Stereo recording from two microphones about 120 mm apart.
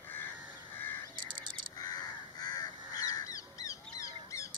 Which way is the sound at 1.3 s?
40° right (ahead or behind).